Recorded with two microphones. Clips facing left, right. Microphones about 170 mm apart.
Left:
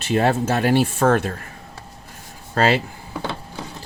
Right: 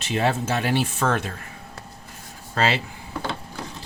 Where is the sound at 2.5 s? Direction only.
45° left (ahead or behind).